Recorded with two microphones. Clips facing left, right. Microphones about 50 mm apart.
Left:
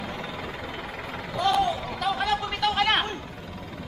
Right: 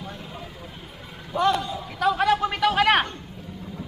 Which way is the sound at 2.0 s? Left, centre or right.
Right.